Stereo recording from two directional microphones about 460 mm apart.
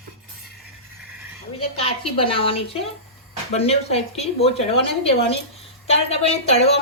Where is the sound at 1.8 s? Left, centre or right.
Centre.